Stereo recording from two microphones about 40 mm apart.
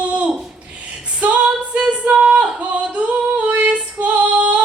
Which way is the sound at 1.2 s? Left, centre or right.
Right.